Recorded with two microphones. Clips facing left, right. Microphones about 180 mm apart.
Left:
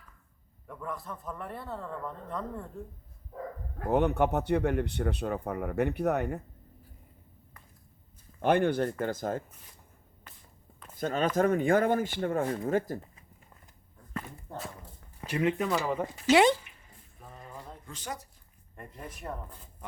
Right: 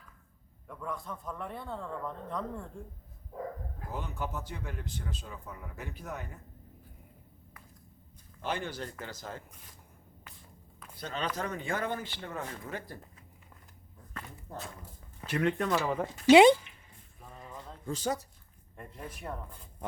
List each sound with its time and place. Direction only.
0.7 s a man's voice: centre (ahead or behind)
3.8 s a man's voice: 65° left (ahead or behind)
8.4 s speech: 55° left (ahead or behind)
10.9 s speech: 45° left (ahead or behind)
15.3 s a man's voice: 5° left (ahead or behind)
16.3 s speech: 15° right (ahead or behind)
17.3 s a sound: 5° left (ahead or behind)
17.8 s speech: 35° right (ahead or behind)
18.8 s a man's voice: centre (ahead or behind)